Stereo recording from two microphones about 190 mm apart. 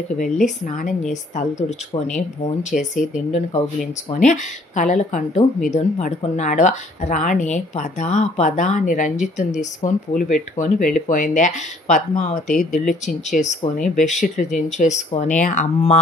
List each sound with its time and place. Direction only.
0.2 s speech: 40° left (ahead or behind)
2.0 s speech: 40° left (ahead or behind)
12.4 s speech: centre (ahead or behind)
13.0 s speech: 40° left (ahead or behind)